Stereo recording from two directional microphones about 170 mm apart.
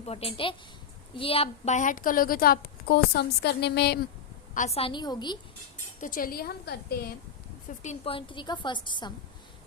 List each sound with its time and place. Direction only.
0.0 s a woman's voice: 35° left (ahead or behind); by 4.0 s 75° left (ahead or behind)
4.5 s a woman's voice: 40° left (ahead or behind); by 5.4 s 25° left (ahead or behind)
6.0 s a woman's voice: 55° left (ahead or behind)
7.8 s a woman's voice: 40° left (ahead or behind)